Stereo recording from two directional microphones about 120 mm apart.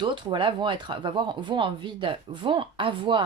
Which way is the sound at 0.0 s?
40° right (ahead or behind).